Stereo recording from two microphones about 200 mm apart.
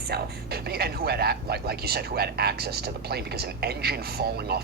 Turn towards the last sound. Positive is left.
turn(degrees=-50)  # may be behind; listen again after turning